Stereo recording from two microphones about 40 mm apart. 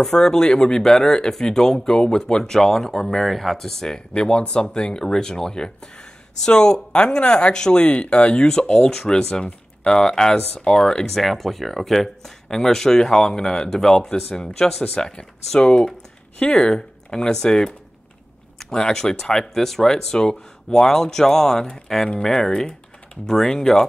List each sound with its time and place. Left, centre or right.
0.0 s speech: centre
4.1 s speech: left
11.1 s speech: centre